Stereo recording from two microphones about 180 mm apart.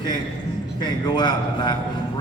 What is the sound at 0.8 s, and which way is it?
Speech, 25° left (ahead or behind).